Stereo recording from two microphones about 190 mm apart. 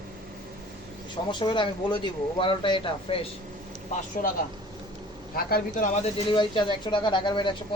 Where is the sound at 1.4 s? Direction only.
25° left (ahead or behind).